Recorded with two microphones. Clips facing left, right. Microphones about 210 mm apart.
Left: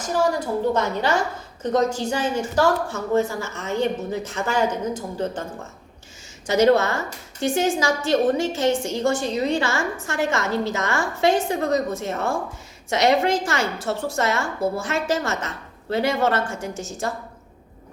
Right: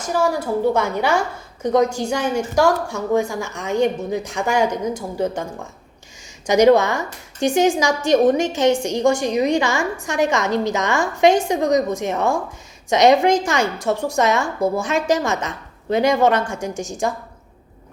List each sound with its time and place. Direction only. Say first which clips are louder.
0.0 s a woman's voice: right 2 dB; 10° right (ahead or behind)
6.5 s a woman's voice: right 4 dB; 15° right (ahead or behind)